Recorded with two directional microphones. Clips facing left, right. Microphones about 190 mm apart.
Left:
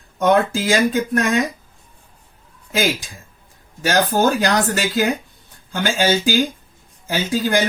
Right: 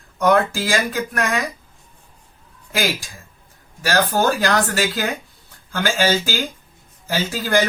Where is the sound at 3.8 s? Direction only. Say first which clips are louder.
Left 2 dB; 20° left (ahead or behind).